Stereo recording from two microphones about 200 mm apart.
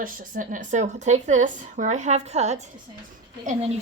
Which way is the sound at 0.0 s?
45° right (ahead or behind).